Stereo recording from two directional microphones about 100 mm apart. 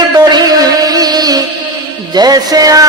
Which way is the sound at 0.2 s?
40° right (ahead or behind).